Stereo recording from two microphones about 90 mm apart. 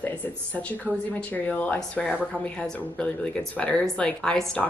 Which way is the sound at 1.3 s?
15° left (ahead or behind).